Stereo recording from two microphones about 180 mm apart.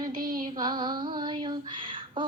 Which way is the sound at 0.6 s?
25° right (ahead or behind).